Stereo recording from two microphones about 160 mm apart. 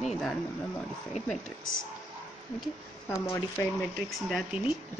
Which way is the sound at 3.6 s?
15° left (ahead or behind).